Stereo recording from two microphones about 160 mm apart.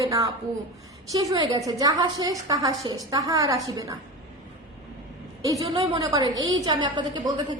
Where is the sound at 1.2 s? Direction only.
20° right (ahead or behind).